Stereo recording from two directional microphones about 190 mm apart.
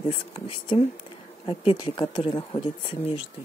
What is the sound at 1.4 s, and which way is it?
Speech, 30° left (ahead or behind).